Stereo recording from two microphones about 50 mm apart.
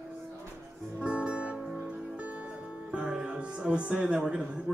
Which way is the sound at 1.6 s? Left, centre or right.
Centre.